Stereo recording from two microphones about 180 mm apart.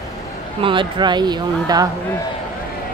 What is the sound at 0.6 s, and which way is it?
Speech, 25° right (ahead or behind).